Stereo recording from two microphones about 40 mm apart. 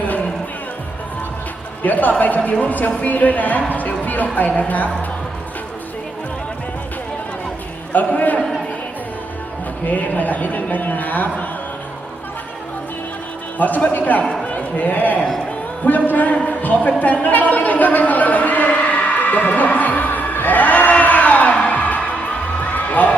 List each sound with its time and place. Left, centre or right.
1.8 s speech: left
7.9 s speech: left
9.8 s speech: left
13.6 s a man's voice: left
15.8 s a sound: left
21.7 s music: left
22.6 s heart sounds: left